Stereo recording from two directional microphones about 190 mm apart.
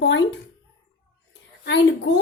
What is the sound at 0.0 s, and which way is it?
Speech, 70° left (ahead or behind).